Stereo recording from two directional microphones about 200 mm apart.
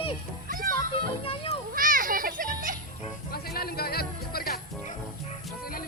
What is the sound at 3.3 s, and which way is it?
Music, 50° left (ahead or behind).